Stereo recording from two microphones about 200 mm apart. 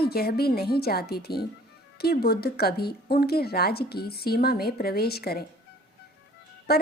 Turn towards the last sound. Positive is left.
turn(degrees=50)  # may be behind; listen again after turning